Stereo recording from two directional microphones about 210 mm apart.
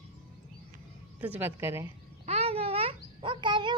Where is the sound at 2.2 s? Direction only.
30° right (ahead or behind).